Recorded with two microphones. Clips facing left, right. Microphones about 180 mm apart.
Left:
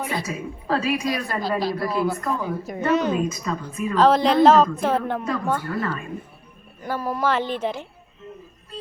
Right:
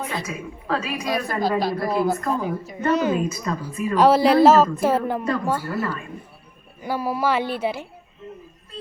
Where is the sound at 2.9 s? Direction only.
5° right (ahead or behind).